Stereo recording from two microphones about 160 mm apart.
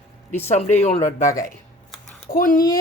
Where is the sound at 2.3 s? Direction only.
60° left (ahead or behind).